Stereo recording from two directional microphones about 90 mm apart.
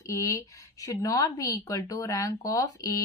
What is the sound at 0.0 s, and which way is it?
Speech, 35° left (ahead or behind).